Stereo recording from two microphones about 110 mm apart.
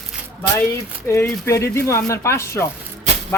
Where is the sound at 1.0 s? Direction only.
25° left (ahead or behind).